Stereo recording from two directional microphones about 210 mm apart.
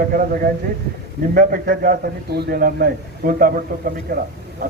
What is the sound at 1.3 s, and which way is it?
Speech, 40° right (ahead or behind).